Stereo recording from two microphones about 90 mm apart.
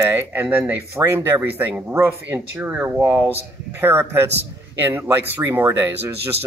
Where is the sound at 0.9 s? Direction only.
30° right (ahead or behind).